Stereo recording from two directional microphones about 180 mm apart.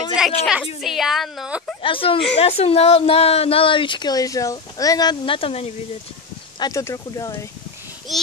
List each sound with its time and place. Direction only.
0.2 s a sound: 5° right (ahead or behind)
0.7 s a woman's voice: centre (ahead or behind)
1.8 s speech: 30° left (ahead or behind)
6.6 s speech: 15° left (ahead or behind)
8.1 s a woman's voice: centre (ahead or behind)